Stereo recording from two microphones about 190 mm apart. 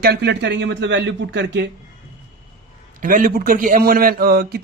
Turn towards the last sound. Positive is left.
turn(degrees=-55)  # may be behind; listen again after turning